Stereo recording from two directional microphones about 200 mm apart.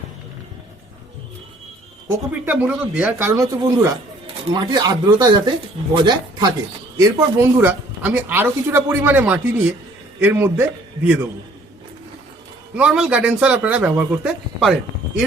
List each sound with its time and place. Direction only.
2.0 s a man's voice: 15° right (ahead or behind)
12.7 s speech: 5° right (ahead or behind)